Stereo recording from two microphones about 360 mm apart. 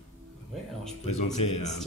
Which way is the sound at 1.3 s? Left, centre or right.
Left.